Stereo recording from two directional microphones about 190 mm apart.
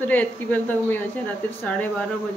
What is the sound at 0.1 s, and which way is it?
Speech, 10° left (ahead or behind).